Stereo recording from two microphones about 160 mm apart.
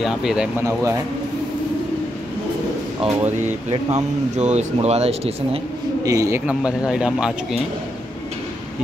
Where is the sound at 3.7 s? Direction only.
45° right (ahead or behind).